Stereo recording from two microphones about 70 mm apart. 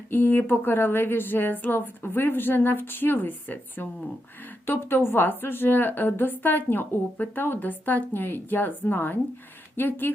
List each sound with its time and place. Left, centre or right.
0.1 s speech: left